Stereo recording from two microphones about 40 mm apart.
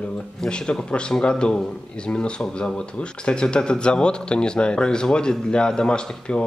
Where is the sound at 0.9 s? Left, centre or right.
Left.